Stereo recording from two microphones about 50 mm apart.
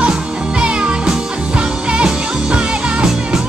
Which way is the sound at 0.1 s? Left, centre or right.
Right.